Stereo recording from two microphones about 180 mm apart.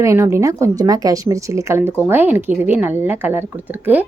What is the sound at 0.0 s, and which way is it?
A woman's voice, 15° right (ahead or behind).